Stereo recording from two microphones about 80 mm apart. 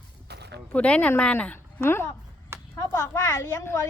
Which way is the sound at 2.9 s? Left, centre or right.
Left.